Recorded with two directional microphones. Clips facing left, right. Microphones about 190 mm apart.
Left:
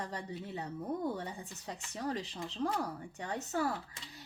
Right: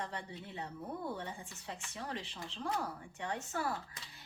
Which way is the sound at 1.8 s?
40° left (ahead or behind).